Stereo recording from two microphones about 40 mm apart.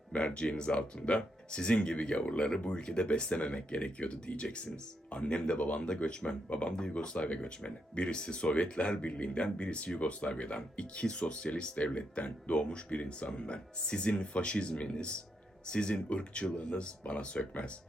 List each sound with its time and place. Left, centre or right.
0.1 s speech: left